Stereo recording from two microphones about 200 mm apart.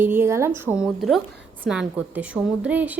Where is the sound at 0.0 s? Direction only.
10° right (ahead or behind).